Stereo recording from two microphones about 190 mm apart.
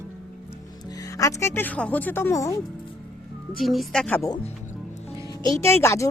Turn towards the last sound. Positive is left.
turn(degrees=15)  # may be behind; listen again after turning